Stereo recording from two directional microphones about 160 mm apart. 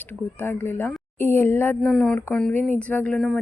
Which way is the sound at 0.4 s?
10° left (ahead or behind).